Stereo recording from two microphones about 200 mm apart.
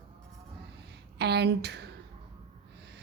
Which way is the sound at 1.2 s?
55° right (ahead or behind).